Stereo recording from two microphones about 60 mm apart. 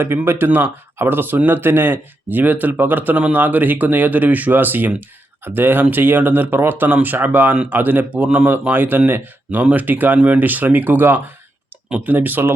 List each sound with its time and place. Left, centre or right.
0.3 s speech: right